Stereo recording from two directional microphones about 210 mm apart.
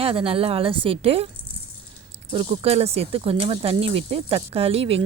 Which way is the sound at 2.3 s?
30° right (ahead or behind).